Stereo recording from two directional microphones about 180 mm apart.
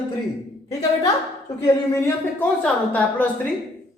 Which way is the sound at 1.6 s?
15° left (ahead or behind).